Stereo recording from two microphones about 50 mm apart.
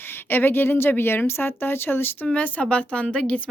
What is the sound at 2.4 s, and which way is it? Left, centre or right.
A woman's voice, left.